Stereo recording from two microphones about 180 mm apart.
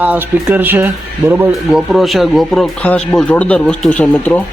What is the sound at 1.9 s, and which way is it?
Speech, centre (ahead or behind).